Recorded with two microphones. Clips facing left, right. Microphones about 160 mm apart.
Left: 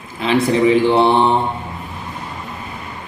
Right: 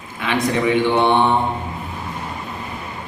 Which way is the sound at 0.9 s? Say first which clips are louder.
Left 2 dB; 30° left (ahead or behind).